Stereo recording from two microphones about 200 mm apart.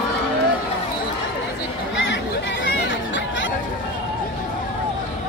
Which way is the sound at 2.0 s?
65° left (ahead or behind).